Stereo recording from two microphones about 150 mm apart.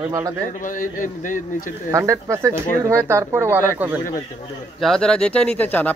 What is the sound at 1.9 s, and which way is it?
Speech, 20° right (ahead or behind).